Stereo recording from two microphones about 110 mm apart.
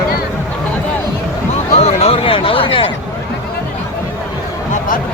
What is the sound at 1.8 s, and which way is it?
Speech, 65° left (ahead or behind).